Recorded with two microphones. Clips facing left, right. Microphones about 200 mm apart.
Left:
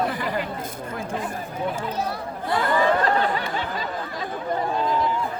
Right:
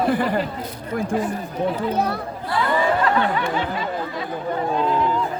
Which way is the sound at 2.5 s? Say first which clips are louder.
Even; 40° left (ahead or behind).